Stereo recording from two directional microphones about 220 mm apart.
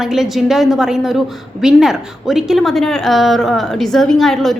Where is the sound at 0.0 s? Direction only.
Centre (ahead or behind).